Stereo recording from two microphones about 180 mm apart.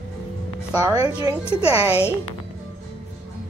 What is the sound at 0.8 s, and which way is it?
A woman's voice, 20° right (ahead or behind).